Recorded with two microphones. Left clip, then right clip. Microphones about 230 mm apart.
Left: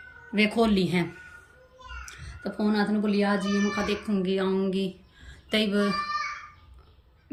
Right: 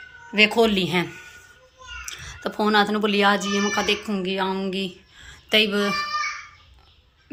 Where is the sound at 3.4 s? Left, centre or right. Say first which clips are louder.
Right 5 dB; right.